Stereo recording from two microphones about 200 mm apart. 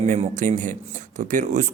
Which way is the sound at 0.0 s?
35° right (ahead or behind).